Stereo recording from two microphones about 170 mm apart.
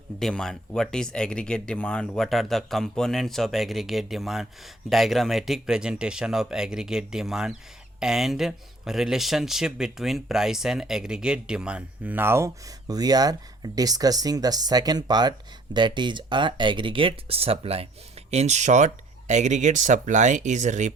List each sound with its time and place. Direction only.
0.2 s speech: 5° left (ahead or behind); by 20.9 s 45° right (ahead or behind)